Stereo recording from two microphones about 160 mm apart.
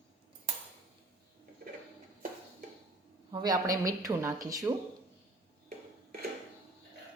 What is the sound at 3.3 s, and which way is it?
A woman's voice, 25° right (ahead or behind).